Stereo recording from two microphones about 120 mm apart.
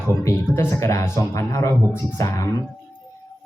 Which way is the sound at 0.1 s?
20° left (ahead or behind).